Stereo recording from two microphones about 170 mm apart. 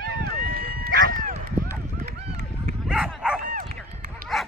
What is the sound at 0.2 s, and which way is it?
Run, 60° right (ahead or behind).